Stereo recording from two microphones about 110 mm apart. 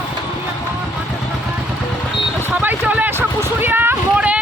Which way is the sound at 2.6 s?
15° right (ahead or behind).